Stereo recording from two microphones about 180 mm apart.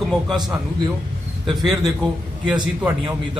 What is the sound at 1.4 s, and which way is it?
Speech, centre (ahead or behind).